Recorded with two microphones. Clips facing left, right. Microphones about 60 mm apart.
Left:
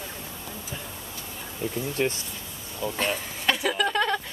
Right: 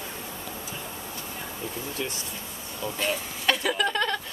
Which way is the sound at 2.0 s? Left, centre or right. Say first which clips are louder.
Left 8 dB; left.